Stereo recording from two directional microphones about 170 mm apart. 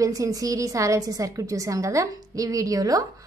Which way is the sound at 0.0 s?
20° right (ahead or behind).